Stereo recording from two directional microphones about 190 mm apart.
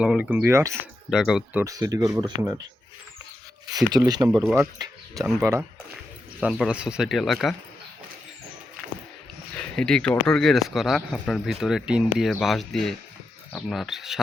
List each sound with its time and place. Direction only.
0.0 s speech: 5° right (ahead or behind)
1.1 s speech: 5° right (ahead or behind)
1.6 s speech: 15° right (ahead or behind)
3.8 s speech: 20° right (ahead or behind)
4.3 s speech: centre (ahead or behind)
4.8 s speech: 15° right (ahead or behind)
9.6 s speech: 5° left (ahead or behind)